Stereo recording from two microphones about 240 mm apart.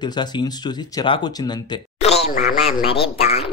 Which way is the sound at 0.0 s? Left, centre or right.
Centre.